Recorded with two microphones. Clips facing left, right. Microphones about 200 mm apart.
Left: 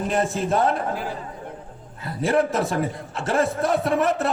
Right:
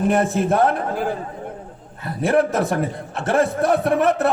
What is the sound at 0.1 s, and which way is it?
Mantra, 60° right (ahead or behind).